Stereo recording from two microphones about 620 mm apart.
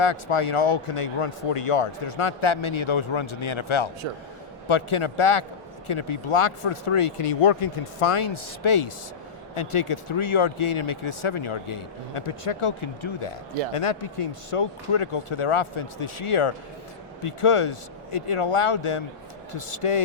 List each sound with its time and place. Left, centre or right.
0.0 s speech: left